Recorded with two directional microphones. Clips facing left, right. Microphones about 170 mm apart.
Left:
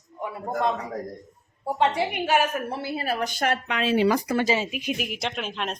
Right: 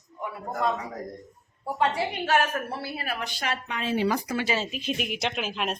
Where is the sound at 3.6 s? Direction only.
90° left.